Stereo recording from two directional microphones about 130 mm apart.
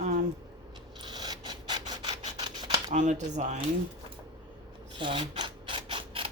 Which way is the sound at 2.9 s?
70° right (ahead or behind).